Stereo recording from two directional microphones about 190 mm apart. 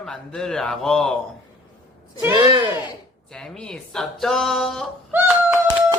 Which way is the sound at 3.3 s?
5° left (ahead or behind).